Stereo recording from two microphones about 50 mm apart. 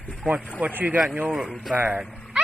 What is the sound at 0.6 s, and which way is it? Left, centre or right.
Speech, right.